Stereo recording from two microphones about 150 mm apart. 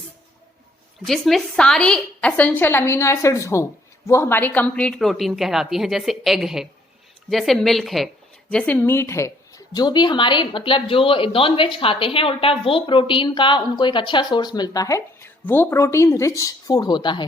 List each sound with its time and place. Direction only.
1.0 s a woman's voice: centre (ahead or behind); by 17.2 s 30° left (ahead or behind)